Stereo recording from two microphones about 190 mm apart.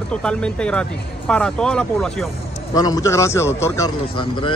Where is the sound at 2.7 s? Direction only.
20° left (ahead or behind).